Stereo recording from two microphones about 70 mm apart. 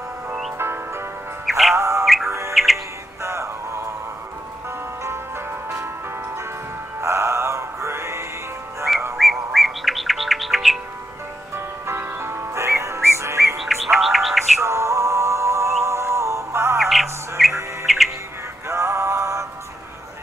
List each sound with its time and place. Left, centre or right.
0.6 s music: right
1.4 s music: centre
1.8 s music: right
2.5 s music: centre
3.2 s music: right
7.0 s music: right
9.1 s bird: centre
11.5 s music: right
13.6 s music: centre
14.6 s music: right
16.7 s music: centre
17.8 s chirp: centre
18.7 s music: right